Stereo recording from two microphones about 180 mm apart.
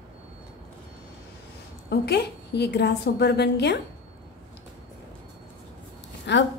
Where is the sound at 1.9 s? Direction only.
65° left (ahead or behind).